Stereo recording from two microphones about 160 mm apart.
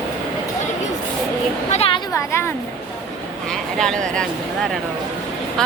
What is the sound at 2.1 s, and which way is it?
Speech, 15° left (ahead or behind).